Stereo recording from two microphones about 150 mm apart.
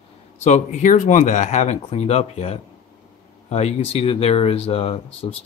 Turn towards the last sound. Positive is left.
turn(degrees=40)  # may be behind; listen again after turning